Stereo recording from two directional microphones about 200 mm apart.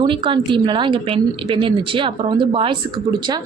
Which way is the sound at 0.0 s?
25° right (ahead or behind).